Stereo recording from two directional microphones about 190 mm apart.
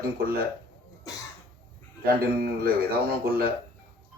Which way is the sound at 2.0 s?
50° right (ahead or behind).